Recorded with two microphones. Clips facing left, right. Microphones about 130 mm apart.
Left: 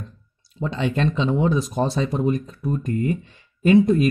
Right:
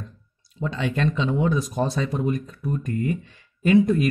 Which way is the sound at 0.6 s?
25° left (ahead or behind).